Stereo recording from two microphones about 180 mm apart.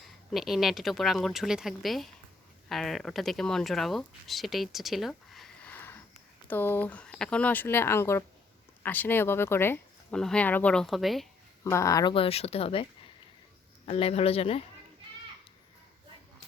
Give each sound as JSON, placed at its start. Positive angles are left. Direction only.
{"t": 0.3, "sound": "speech", "side_deg": 0}
{"t": 11.6, "sound": "speech", "side_deg": 15}
{"t": 12.1, "sound": "speech", "side_deg": 30}